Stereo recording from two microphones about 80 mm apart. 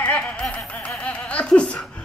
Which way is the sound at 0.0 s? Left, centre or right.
Centre.